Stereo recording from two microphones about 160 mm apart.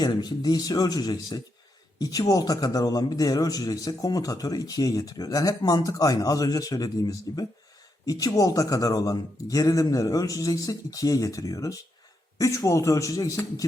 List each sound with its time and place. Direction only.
0.0 s a man's voice: 25° left (ahead or behind)